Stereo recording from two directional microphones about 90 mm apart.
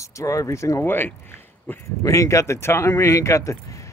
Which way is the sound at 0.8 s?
25° left (ahead or behind).